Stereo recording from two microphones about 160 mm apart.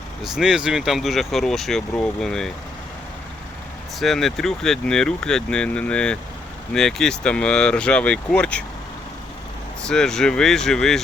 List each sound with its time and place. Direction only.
0.2 s speech: 5° right (ahead or behind)
4.0 s speech: centre (ahead or behind)
9.8 s speech: 5° left (ahead or behind)